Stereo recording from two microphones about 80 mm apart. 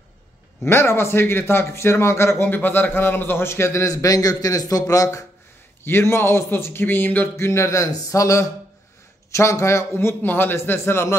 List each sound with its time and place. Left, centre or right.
0.7 s a man's voice: left
5.9 s a man's voice: left
7.3 s a man's voice: left